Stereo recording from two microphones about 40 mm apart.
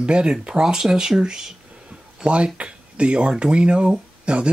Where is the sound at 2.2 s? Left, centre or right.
Right.